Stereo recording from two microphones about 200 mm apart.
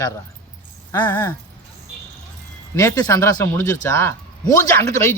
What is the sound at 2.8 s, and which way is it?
Speech, 15° left (ahead or behind).